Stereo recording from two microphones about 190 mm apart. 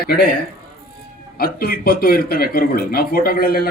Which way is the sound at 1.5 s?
55° left (ahead or behind).